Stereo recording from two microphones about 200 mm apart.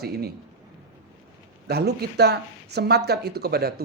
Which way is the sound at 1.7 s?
55° right (ahead or behind).